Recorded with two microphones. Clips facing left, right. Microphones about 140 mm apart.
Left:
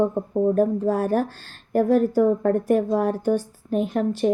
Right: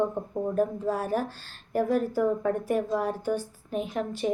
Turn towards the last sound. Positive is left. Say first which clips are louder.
# left 7 dB
turn(degrees=45)  # may be behind; listen again after turning